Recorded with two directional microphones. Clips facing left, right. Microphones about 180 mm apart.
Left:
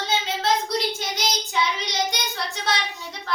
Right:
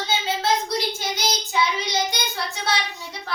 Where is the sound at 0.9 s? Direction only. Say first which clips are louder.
Right 1 dB; centre (ahead or behind).